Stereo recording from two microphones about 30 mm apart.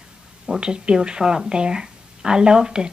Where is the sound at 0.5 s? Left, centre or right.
Right.